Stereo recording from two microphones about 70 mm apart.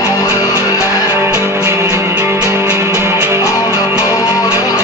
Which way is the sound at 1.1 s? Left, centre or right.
Right.